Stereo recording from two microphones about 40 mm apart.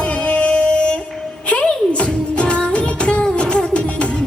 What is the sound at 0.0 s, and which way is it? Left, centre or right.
Music, left.